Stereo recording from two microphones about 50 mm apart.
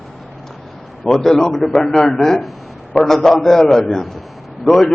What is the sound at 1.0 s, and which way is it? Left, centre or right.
A man's voice, centre.